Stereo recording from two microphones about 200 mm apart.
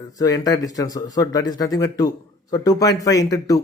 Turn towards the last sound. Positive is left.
turn(degrees=20)  # may be behind; listen again after turning